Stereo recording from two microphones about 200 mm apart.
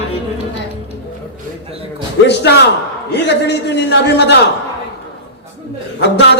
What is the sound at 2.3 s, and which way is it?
Speech, 60° left (ahead or behind).